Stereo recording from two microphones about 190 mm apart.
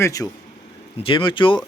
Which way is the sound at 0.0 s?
15° left (ahead or behind).